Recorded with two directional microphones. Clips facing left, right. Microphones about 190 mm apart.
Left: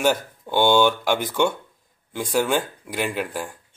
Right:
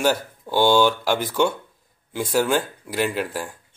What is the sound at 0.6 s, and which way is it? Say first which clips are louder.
Speech: even; 15° left (ahead or behind).